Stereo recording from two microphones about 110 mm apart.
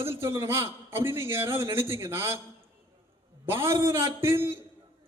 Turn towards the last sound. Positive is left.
turn(degrees=-20)  # may be behind; listen again after turning